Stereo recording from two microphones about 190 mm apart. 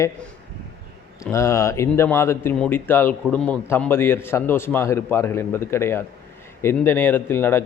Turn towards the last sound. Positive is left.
turn(degrees=10)  # may be behind; listen again after turning